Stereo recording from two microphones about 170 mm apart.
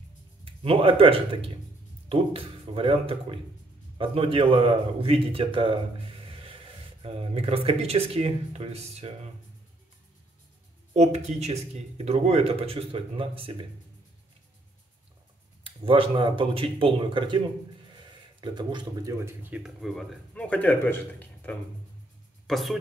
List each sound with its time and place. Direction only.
0.5 s speech: 30° right (ahead or behind)
11.0 s speech: 40° right (ahead or behind)
15.6 s speech: 30° right (ahead or behind)
18.4 s speech: 25° right (ahead or behind)
19.1 s speech: 15° right (ahead or behind)